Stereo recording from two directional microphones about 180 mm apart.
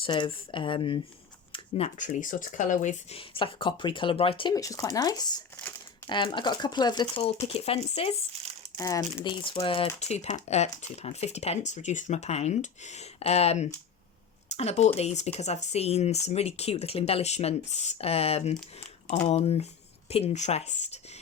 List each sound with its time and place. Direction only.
0.0 s speech: 30° left (ahead or behind)
8.8 s speech: 20° left (ahead or behind); by 21.0 s 40° left (ahead or behind)